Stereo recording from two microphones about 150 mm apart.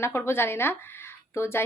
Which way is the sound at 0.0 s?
15° left (ahead or behind).